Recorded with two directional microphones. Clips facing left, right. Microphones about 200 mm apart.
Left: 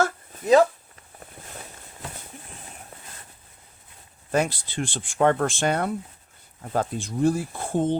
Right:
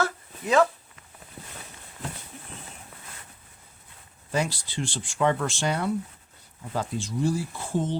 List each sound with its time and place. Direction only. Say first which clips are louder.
0.0 s dog: left 4 dB; 40° left (ahead or behind)
4.3 s speech: left 4 dB; 55° left (ahead or behind)